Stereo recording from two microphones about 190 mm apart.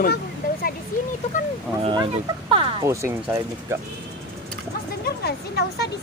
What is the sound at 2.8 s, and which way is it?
Speech, 15° right (ahead or behind).